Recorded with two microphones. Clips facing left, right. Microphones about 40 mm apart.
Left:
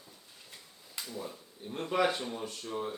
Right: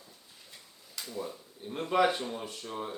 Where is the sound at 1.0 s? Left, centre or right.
Left.